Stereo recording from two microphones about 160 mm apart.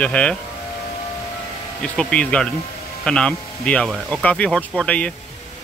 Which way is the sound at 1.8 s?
5° left (ahead or behind).